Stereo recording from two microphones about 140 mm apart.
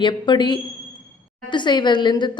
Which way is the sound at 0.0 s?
35° left (ahead or behind).